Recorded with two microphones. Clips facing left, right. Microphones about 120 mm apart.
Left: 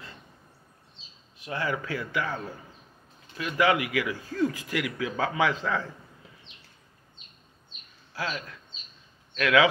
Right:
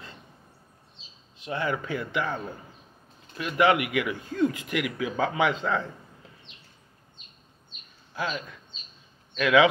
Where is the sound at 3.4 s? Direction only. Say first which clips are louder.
Right 2 dB; 25° right (ahead or behind).